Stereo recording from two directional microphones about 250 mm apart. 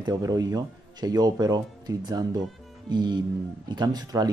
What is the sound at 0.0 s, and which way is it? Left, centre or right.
Speech, centre.